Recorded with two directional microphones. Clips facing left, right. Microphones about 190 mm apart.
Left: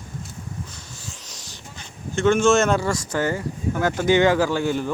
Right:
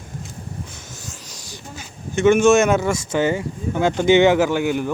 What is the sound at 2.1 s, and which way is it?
Speech, 15° right (ahead or behind).